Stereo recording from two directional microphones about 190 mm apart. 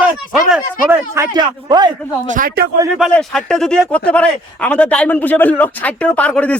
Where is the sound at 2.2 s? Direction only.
45° right (ahead or behind).